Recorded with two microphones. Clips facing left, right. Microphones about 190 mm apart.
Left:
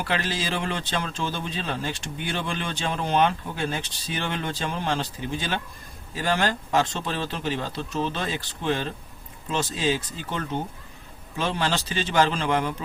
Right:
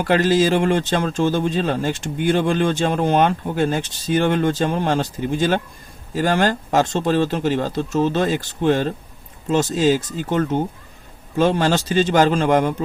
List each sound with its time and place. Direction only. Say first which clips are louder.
0.0 s speech: right 12 dB; 45° right (ahead or behind)